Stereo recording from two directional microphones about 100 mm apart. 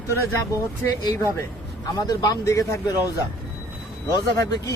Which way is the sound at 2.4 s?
30° left (ahead or behind).